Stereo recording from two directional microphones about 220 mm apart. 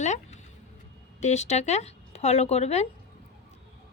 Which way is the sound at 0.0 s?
30° left (ahead or behind).